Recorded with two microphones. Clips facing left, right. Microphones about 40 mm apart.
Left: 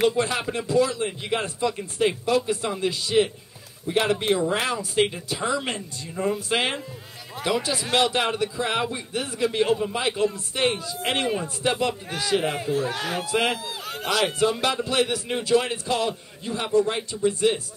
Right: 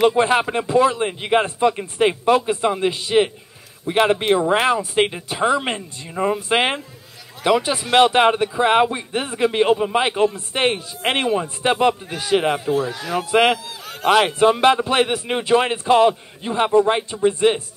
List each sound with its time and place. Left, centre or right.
0.1 s a man's voice: right
12.8 s speech: left
13.3 s a man's voice: right